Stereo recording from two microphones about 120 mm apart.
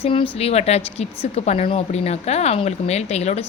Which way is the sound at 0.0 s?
50° left (ahead or behind).